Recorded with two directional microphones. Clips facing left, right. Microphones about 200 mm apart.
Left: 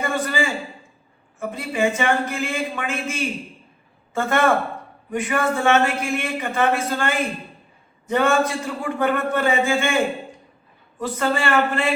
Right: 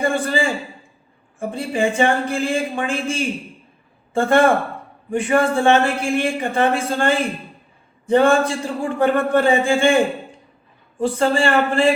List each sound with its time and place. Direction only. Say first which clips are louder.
0.0 s a man's voice: right 4 dB; 30° right (ahead or behind)
1.4 s a man's voice: right 2 dB; 30° right (ahead or behind)